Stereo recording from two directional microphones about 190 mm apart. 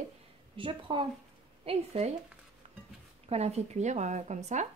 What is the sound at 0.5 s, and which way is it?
Speech, 25° right (ahead or behind).